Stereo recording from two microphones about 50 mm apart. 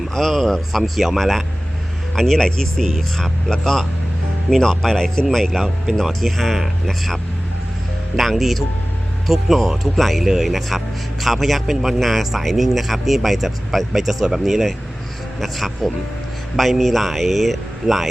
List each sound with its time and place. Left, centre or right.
0.1 s speech: centre